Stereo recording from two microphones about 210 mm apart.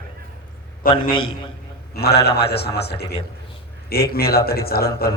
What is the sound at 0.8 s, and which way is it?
Speech, 45° left (ahead or behind).